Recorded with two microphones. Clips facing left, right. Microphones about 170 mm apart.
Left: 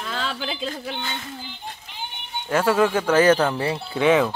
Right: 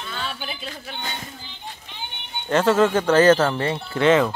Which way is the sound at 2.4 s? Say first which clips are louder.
Right 2 dB; 10° left (ahead or behind).